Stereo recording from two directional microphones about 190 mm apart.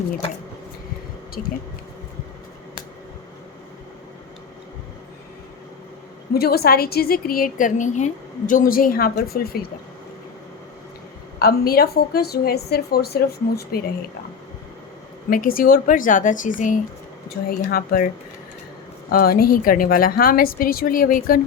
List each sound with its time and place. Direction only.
6.3 s a woman's voice: 55° left (ahead or behind)
11.3 s a woman's voice: 55° left (ahead or behind)
15.3 s a woman's voice: 50° left (ahead or behind)
19.1 s a woman's voice: 50° left (ahead or behind)